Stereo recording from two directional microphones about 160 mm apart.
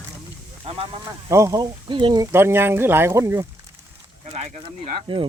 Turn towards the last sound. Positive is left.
turn(degrees=-45)  # may be behind; listen again after turning